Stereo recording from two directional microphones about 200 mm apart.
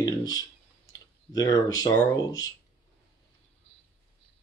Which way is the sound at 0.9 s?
20° left (ahead or behind).